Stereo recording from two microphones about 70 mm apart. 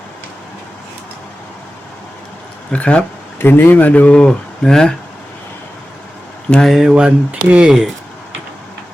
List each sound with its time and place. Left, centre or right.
2.7 s speech: centre
3.4 s speech: left; by 4.9 s centre
6.5 s speech: centre
6.9 s speech: centre